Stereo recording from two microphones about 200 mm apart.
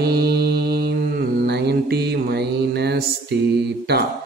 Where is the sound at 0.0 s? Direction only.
50° right (ahead or behind).